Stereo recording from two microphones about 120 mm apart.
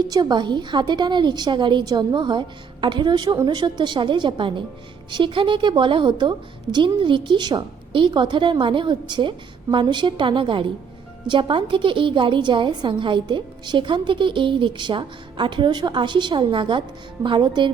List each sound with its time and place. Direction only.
0.0 s a woman's voice: 35° right (ahead or behind)